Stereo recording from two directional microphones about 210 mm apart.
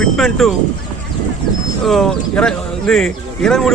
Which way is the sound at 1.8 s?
Centre (ahead or behind).